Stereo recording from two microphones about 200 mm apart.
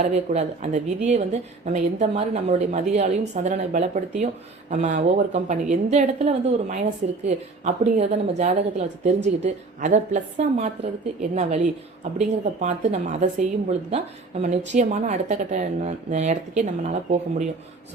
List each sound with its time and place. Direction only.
0.0 s a woman's voice: 35° right (ahead or behind)